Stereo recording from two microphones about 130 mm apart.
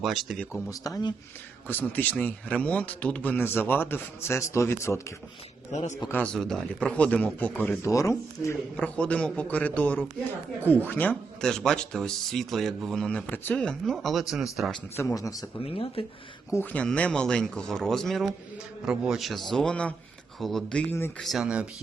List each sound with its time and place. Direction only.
0.0 s speech: centre (ahead or behind)
0.7 s speech: 30° left (ahead or behind)
1.6 s a man's voice: 15° left (ahead or behind)
5.7 s a man's voice: 60° left (ahead or behind)
6.1 s a man's voice: 10° left (ahead or behind)
7.8 s speech: 25° left (ahead or behind)
8.7 s a man's voice: 10° left (ahead or behind)
14.9 s speech: 25° left (ahead or behind)
15.6 s speech: 45° left (ahead or behind)
16.5 s a man's voice: 15° left (ahead or behind); by 21.7 s 10° right (ahead or behind)